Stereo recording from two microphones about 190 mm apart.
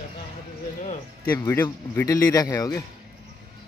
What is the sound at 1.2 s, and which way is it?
A man's voice, 10° left (ahead or behind).